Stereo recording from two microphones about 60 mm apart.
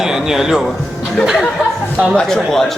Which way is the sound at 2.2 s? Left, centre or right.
Centre.